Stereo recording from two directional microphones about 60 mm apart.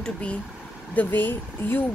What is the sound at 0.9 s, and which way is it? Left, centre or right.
Speech, left.